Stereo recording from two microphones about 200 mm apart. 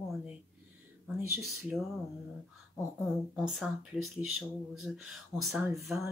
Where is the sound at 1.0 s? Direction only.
5° right (ahead or behind).